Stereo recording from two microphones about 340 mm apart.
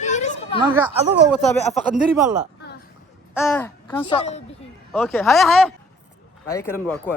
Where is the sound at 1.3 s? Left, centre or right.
Centre.